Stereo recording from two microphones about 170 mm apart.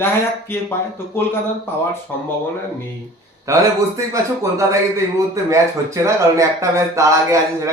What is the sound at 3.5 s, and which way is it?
A man's voice, 20° right (ahead or behind).